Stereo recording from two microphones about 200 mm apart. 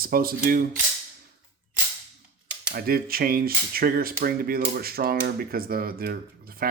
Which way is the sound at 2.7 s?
50° right (ahead or behind).